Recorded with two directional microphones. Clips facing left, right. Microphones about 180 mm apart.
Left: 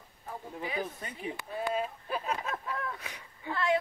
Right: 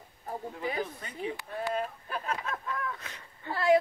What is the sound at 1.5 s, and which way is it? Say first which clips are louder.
Speech: left 2 dB; 5° left (ahead or behind).